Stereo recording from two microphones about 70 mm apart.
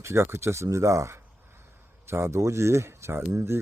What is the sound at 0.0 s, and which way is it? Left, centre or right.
Speech, right.